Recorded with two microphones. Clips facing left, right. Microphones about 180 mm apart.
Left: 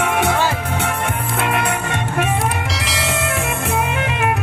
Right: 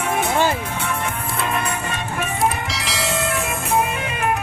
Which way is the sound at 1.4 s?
75° left (ahead or behind).